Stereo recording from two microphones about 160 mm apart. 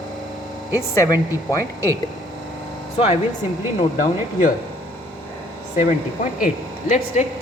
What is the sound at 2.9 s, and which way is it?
Speech, 40° left (ahead or behind).